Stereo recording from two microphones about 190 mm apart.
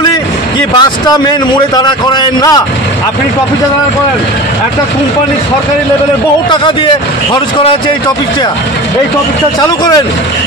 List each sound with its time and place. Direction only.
0.7 s a man's voice: 20° left (ahead or behind)
9.6 s a man's voice: 20° left (ahead or behind)